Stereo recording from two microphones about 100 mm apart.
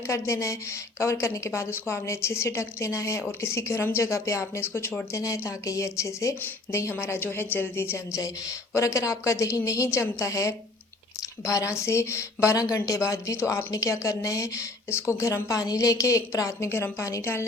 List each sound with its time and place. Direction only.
0.1 s a woman's voice: 30° left (ahead or behind)